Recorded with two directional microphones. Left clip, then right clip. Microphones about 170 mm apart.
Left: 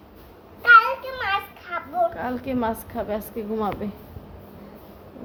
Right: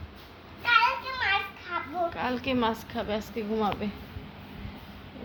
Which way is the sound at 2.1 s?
15° left (ahead or behind).